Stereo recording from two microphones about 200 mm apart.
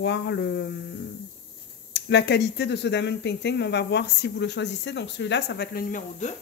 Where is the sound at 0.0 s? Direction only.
60° left (ahead or behind).